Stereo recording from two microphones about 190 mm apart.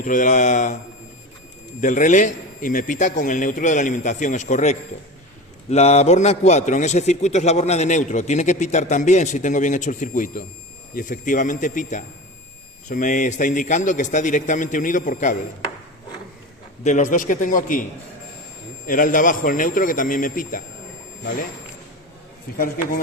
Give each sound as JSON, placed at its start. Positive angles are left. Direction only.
{"t": 0.0, "sound": "a man's voice", "side_deg": 40}
{"t": 1.8, "sound": "a man's voice", "side_deg": 40}
{"t": 16.8, "sound": "a man's voice", "side_deg": 40}
{"t": 18.9, "sound": "a man's voice", "side_deg": 45}
{"t": 22.5, "sound": "a man's voice", "side_deg": 50}